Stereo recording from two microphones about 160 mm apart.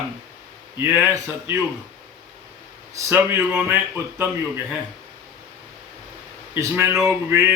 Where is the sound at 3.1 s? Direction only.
10° right (ahead or behind).